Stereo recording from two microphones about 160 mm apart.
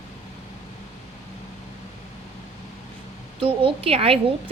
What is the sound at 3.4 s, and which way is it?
Speech, 35° right (ahead or behind).